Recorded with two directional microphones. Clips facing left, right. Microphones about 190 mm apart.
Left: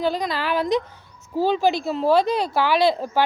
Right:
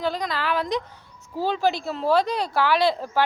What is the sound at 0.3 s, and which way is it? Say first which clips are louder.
Speech: left 2 dB; 10° left (ahead or behind).